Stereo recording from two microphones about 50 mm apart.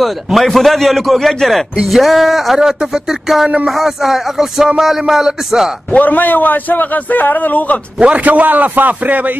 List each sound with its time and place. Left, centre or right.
0.0 s speech: centre
5.9 s a man's voice: left
8.0 s a man's voice: right